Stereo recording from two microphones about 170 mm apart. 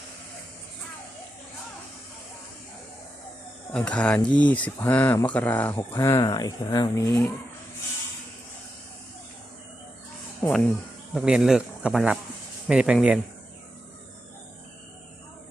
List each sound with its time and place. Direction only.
3.7 s speech: 5° left (ahead or behind)
11.1 s speech: centre (ahead or behind)